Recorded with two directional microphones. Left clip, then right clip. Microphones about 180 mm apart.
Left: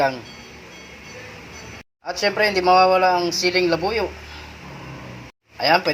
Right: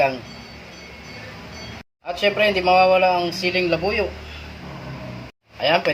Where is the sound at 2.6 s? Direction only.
10° left (ahead or behind).